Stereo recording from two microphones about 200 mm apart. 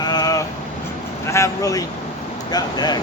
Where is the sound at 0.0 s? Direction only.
20° left (ahead or behind).